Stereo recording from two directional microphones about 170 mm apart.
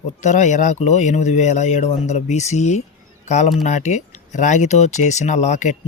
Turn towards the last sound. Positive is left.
turn(degrees=45)  # may be behind; listen again after turning